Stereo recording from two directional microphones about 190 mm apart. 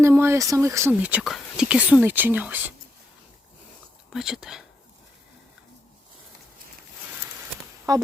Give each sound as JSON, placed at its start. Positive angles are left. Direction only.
{"t": 0.0, "sound": "speech", "side_deg": -15}
{"t": 4.1, "sound": "speech", "side_deg": 0}
{"t": 7.9, "sound": "speech", "side_deg": -20}